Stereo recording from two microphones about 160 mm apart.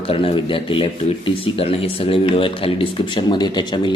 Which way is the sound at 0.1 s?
35° left (ahead or behind).